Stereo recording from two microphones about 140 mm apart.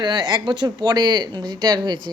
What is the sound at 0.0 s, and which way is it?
Speech, 30° right (ahead or behind).